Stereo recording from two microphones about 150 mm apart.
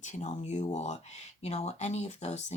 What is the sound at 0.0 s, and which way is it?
Speech, 55° left (ahead or behind).